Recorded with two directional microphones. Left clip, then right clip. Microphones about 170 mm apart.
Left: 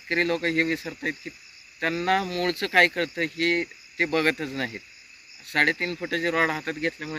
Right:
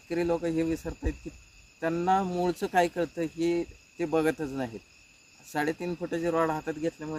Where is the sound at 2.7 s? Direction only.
10° right (ahead or behind).